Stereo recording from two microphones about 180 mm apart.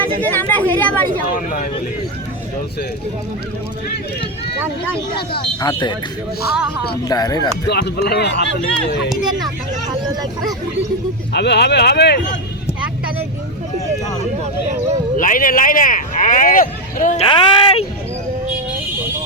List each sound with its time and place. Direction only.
0.0 s speech: 10° left (ahead or behind)
1.4 s speech: 50° left (ahead or behind)
5.5 s speech: 25° left (ahead or behind)
7.1 s speech: 20° left (ahead or behind)
7.7 s speech: 70° left (ahead or behind)
11.3 s speech: 70° left (ahead or behind)
15.2 s speech: 50° left (ahead or behind)
17.2 s speech: 30° left (ahead or behind)